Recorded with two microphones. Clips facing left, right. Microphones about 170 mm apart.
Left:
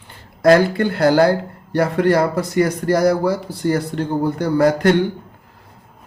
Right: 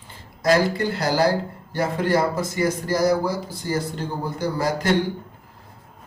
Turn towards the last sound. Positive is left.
turn(degrees=60)  # may be behind; listen again after turning